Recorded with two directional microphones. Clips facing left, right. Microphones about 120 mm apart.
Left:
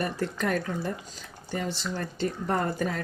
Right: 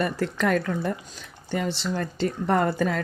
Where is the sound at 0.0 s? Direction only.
90° right.